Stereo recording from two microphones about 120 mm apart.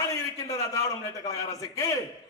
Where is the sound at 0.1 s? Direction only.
25° left (ahead or behind).